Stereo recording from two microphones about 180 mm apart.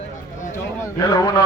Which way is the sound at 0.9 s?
20° left (ahead or behind).